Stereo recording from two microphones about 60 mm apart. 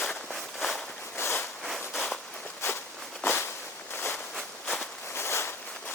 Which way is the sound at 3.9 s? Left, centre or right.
Left.